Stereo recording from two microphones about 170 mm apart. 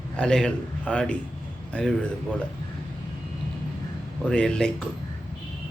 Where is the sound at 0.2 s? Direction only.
5° left (ahead or behind).